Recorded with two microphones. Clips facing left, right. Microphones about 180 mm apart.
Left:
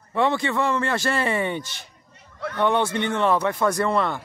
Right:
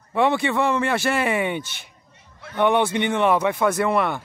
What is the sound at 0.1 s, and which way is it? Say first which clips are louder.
Speech: right 2 dB; 15° right (ahead or behind).